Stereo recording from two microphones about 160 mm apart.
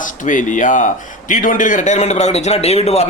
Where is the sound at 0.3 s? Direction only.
50° left (ahead or behind).